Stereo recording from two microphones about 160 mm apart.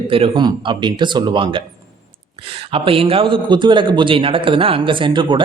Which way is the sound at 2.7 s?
35° right (ahead or behind).